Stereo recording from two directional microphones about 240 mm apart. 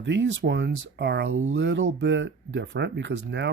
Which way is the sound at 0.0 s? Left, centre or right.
Right.